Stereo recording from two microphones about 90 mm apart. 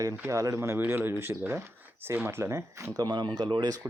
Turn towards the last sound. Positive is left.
turn(degrees=-60)  # may be behind; listen again after turning